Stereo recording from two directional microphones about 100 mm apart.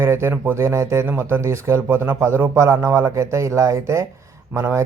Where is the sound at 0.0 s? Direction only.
25° right (ahead or behind).